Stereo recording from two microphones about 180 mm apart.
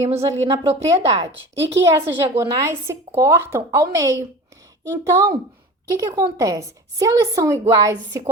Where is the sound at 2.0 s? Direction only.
15° right (ahead or behind).